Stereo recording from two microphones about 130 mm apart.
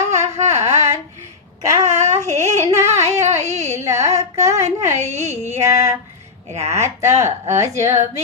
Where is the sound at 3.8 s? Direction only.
20° right (ahead or behind).